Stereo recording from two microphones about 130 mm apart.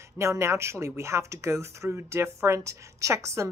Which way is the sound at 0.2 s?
20° right (ahead or behind).